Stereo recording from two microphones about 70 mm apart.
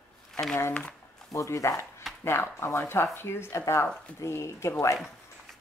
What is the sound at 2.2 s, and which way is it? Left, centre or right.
Speech, left.